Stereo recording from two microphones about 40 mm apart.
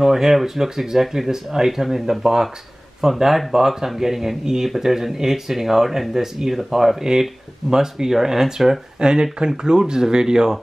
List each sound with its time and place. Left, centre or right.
0.0 s speech: centre